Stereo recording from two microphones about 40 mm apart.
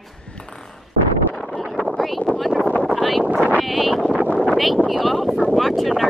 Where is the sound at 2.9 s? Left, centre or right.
Centre.